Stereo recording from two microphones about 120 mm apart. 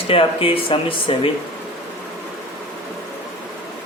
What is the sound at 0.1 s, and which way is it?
Speech, 50° left (ahead or behind).